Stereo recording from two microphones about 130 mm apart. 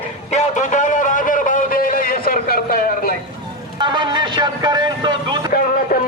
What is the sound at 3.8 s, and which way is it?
Vehicle, 35° right (ahead or behind).